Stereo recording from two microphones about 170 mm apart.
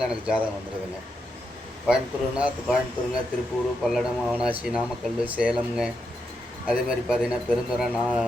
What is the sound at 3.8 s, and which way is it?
A man's voice, centre (ahead or behind).